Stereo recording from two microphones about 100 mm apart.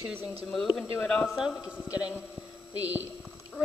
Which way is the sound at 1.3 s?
5° right (ahead or behind).